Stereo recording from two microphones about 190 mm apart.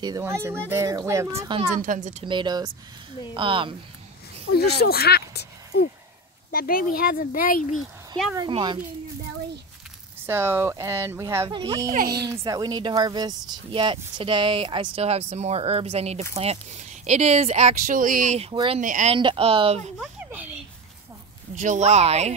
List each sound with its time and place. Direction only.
0.0 s speech: 15° right (ahead or behind)
1.8 s speech: 40° right (ahead or behind)
2.2 s speech: 25° right (ahead or behind)
4.6 s speech: 55° left (ahead or behind)
8.4 s speech: 25° right (ahead or behind)
10.2 s speech: 10° right (ahead or behind)
11.9 s speech: 50° right (ahead or behind)
12.3 s speech: 20° right (ahead or behind); by 18.5 s 40° right (ahead or behind)
18.5 s speech: 25° right (ahead or behind)
18.8 s speech: 40° right (ahead or behind)
19.1 s speech: 25° right (ahead or behind)
20.2 s a sound: 10° right (ahead or behind)
21.5 s speech: 40° right (ahead or behind)